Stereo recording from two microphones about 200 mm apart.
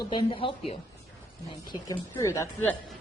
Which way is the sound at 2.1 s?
15° left (ahead or behind).